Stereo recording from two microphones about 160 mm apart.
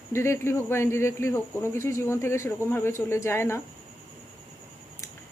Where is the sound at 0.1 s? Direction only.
15° left (ahead or behind).